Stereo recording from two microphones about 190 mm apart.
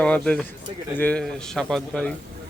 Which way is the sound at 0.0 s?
5° left (ahead or behind).